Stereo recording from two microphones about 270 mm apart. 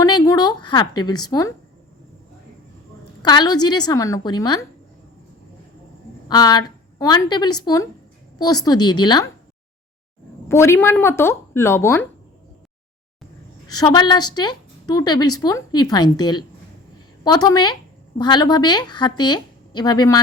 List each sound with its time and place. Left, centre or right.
0.0 s a woman's voice: centre
3.2 s speech: centre
6.2 s a woman's voice: centre
10.5 s speech: centre
13.7 s a woman's voice: centre